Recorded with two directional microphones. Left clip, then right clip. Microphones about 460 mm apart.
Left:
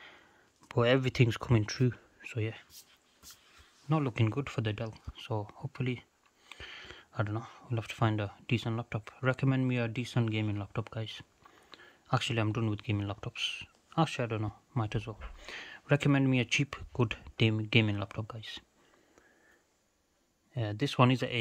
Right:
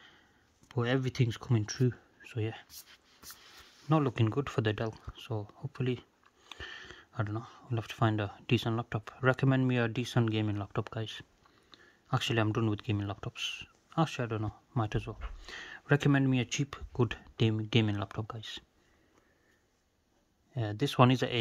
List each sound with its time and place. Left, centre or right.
0.7 s speech: centre
3.9 s speech: centre
20.5 s speech: centre